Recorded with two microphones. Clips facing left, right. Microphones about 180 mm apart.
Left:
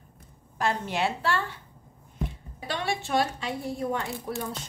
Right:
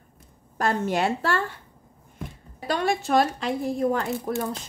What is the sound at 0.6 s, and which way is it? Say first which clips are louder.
Speech: right 4 dB; 45° right (ahead or behind).